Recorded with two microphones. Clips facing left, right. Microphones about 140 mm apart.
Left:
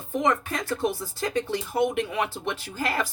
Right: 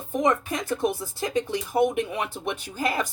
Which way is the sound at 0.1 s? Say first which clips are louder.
Right 1 dB; 15° right (ahead or behind).